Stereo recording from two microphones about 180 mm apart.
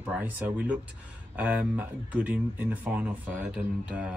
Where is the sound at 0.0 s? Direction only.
10° right (ahead or behind).